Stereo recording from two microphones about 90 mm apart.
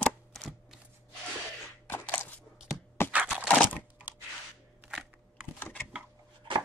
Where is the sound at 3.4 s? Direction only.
15° left (ahead or behind).